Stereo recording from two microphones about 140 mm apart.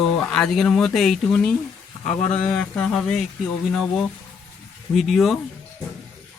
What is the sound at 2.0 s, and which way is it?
Speech, 55° left (ahead or behind).